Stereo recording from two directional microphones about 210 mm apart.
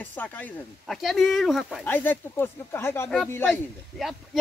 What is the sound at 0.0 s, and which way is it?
Speech, 10° left (ahead or behind).